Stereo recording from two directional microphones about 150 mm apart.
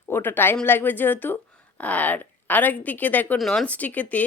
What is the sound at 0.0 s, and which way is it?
Speech, 15° left (ahead or behind).